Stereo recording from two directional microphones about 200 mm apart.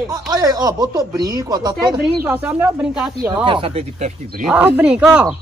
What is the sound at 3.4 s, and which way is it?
Speech, 25° right (ahead or behind).